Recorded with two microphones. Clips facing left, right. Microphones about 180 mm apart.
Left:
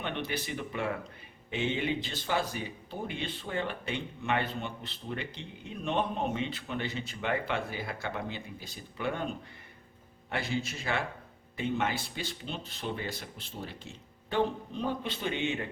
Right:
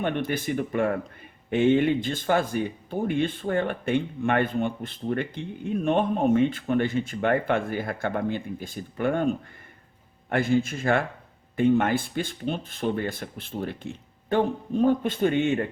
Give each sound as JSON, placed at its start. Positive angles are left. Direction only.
{"t": 0.0, "sound": "speech", "side_deg": -50}